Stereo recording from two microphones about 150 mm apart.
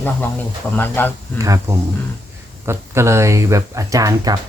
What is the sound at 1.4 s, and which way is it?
Speech, 20° right (ahead or behind).